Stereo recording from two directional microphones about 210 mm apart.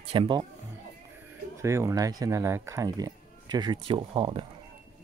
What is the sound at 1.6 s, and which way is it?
Speech, 15° right (ahead or behind).